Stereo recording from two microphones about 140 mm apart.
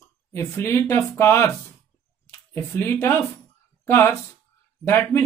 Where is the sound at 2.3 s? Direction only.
15° left (ahead or behind).